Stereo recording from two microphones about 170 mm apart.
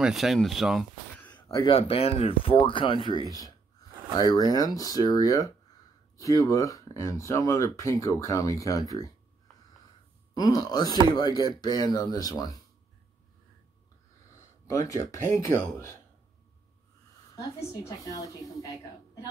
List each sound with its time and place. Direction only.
0.0 s speech: centre (ahead or behind)
1.5 s speech: 30° left (ahead or behind)
10.3 s speech: 20° left (ahead or behind)
14.7 s speech: 15° left (ahead or behind)
17.6 s speech: 20° left (ahead or behind)